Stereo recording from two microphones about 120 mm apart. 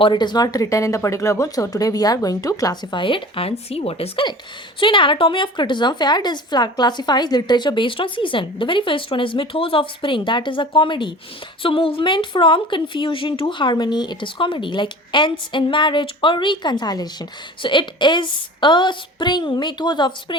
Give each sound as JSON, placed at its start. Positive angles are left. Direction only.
{"t": 0.0, "sound": "a woman's voice", "side_deg": 40}
{"t": 2.9, "sound": "a woman's voice", "side_deg": 45}